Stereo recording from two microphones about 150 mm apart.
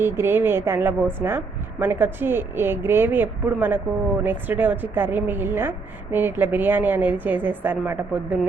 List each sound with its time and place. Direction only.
0.0 s a woman's voice: 15° right (ahead or behind)